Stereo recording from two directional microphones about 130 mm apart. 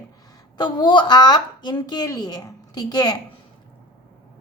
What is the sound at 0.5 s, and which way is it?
A woman's voice, 35° left (ahead or behind).